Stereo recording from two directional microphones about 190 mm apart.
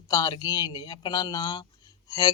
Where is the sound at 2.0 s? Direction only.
20° left (ahead or behind).